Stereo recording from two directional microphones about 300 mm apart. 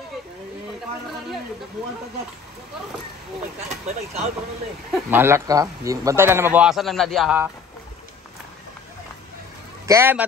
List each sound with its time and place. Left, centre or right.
3.6 s speech: right
4.9 s a man's voice: centre
9.8 s a man's voice: centre